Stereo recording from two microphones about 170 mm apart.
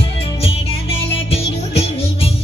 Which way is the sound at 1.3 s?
35° left (ahead or behind).